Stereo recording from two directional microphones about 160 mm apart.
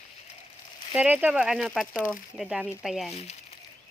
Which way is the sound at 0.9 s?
10° right (ahead or behind).